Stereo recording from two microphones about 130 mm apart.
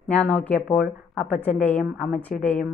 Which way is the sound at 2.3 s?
90° left.